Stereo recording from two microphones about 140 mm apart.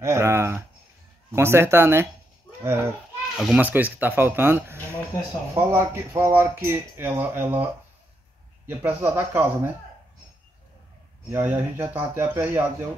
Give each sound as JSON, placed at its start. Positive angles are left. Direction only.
{"t": 0.0, "sound": "speech", "side_deg": -20}
{"t": 8.6, "sound": "speech", "side_deg": -15}
{"t": 11.2, "sound": "speech", "side_deg": -15}